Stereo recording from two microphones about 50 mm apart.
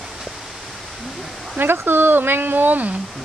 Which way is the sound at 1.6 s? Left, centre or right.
Right.